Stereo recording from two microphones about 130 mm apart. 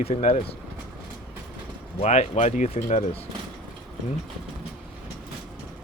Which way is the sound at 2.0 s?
60° left (ahead or behind).